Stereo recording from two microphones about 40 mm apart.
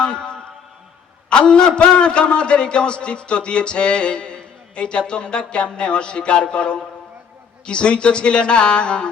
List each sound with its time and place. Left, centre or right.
0.0 s music: left
1.3 s a man's voice: left